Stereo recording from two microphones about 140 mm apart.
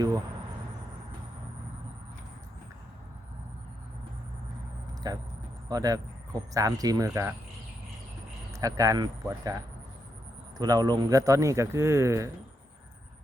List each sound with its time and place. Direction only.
5.0 s speech: 25° right (ahead or behind)
8.5 s speech: 25° right (ahead or behind)
10.6 s speech: 30° right (ahead or behind)